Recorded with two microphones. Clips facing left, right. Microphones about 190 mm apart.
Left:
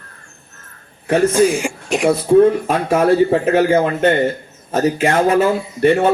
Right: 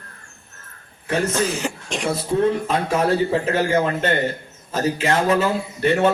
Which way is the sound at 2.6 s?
55° left (ahead or behind).